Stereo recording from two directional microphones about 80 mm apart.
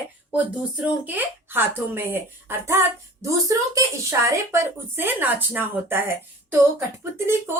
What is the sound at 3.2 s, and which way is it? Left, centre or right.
Speech, right.